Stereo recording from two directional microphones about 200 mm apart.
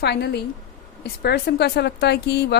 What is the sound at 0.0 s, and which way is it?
A woman's voice, 55° left (ahead or behind).